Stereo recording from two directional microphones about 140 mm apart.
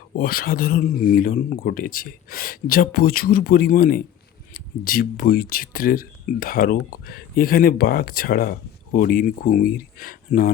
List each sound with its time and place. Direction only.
0.2 s speech: 90° left